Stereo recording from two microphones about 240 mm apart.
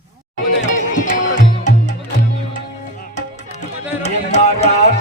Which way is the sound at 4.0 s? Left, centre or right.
Left.